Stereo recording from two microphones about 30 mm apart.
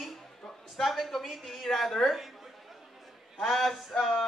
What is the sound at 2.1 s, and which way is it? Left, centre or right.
Speech, centre.